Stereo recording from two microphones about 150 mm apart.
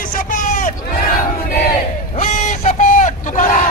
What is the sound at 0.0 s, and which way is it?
Vehicle, 65° left (ahead or behind).